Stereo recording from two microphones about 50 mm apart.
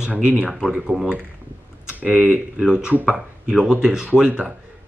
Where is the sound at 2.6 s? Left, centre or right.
Centre.